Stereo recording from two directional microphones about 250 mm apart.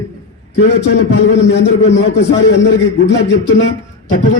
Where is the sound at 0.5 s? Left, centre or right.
Left.